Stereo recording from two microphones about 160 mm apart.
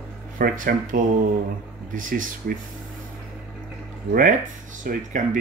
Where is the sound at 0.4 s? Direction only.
60° right (ahead or behind).